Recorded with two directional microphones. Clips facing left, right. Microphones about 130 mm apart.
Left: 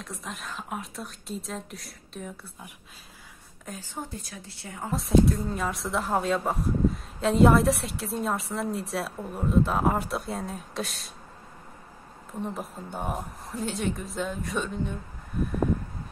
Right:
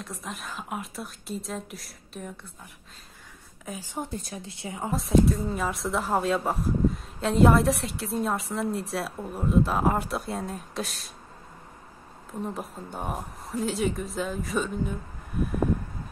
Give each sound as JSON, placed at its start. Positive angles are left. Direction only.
{"t": 0.0, "sound": "speech", "side_deg": 0}
{"t": 3.6, "sound": "a woman's voice", "side_deg": -5}
{"t": 4.1, "sound": "a woman's voice", "side_deg": -25}
{"t": 4.9, "sound": "speech", "side_deg": 0}
{"t": 12.5, "sound": "speech", "side_deg": 0}